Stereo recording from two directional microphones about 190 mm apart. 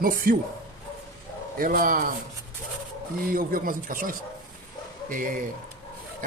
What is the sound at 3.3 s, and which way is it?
Speech, 50° right (ahead or behind).